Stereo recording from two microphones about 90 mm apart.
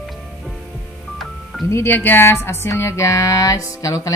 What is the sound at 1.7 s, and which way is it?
Music, 30° left (ahead or behind).